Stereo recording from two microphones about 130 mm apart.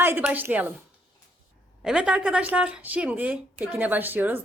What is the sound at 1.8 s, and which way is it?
Speech, 5° right (ahead or behind).